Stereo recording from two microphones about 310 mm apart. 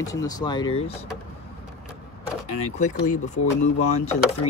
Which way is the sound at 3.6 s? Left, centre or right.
Left.